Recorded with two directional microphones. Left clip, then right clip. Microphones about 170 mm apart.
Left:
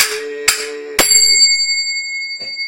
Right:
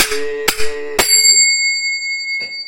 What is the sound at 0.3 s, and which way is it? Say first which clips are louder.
Music: left 1 dB; 15° right (ahead or behind).